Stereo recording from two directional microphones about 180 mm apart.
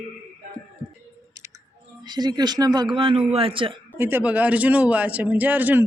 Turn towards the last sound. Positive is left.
turn(degrees=-10)  # may be behind; listen again after turning